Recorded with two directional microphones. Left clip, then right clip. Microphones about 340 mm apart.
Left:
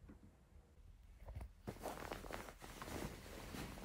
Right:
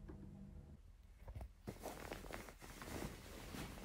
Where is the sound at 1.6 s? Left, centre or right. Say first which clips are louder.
Left 3 dB; centre.